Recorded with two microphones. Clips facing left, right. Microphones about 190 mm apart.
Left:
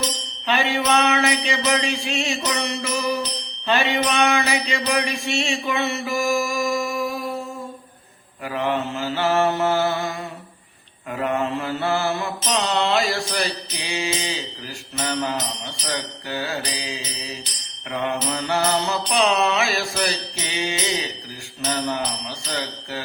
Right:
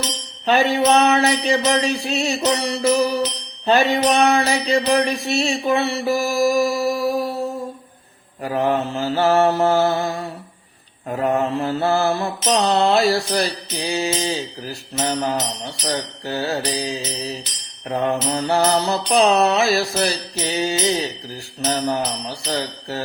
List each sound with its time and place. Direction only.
0.4 s mantra: 40° right (ahead or behind)
22.4 s speech: 40° right (ahead or behind)